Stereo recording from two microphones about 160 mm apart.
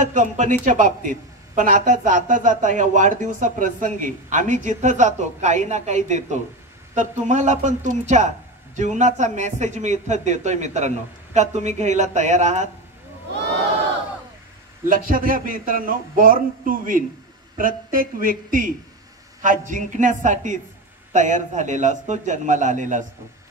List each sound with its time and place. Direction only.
0.0 s a woman's voice: 50° right (ahead or behind)
14.9 s a woman's voice: 60° right (ahead or behind)